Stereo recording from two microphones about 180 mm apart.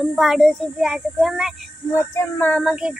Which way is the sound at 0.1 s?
Centre (ahead or behind).